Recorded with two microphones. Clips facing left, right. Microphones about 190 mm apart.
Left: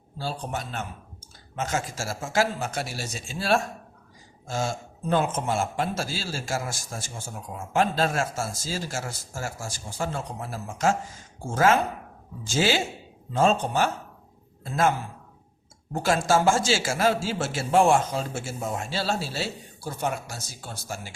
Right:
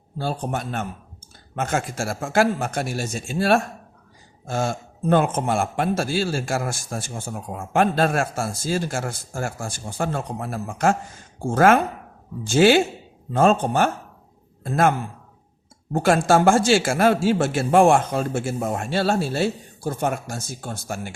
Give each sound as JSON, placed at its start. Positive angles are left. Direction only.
{"t": 0.2, "sound": "a man's voice", "side_deg": -55}